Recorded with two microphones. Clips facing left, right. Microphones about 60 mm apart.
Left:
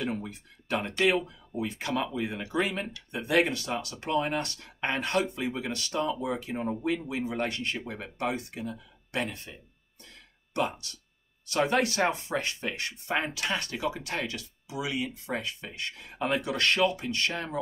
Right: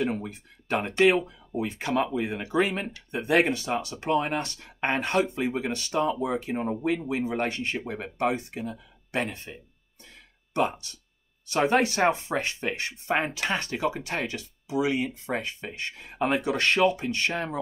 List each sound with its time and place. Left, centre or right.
0.0 s speech: right